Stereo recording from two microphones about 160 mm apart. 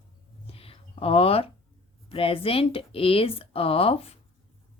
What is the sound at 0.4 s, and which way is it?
Whispering, 35° left (ahead or behind).